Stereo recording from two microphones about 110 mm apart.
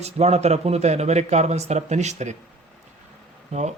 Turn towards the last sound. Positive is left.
turn(degrees=-90)